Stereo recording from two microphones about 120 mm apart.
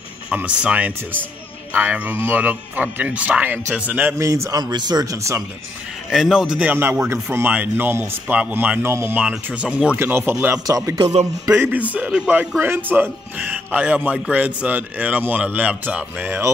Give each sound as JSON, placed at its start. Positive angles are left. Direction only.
{"t": 0.3, "sound": "a man's voice", "side_deg": -10}
{"t": 4.1, "sound": "speech", "side_deg": -25}
{"t": 6.0, "sound": "a man's voice", "side_deg": -5}
{"t": 10.7, "sound": "speech", "side_deg": -25}
{"t": 11.5, "sound": "a man's voice", "side_deg": -15}